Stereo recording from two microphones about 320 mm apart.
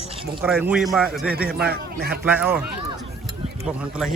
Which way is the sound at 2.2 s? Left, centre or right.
Centre.